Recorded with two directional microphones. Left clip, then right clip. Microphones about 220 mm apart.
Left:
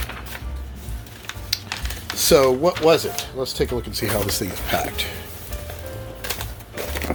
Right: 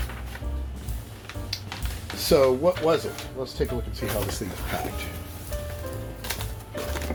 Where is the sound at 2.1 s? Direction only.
30° left (ahead or behind); by 4.0 s 45° left (ahead or behind).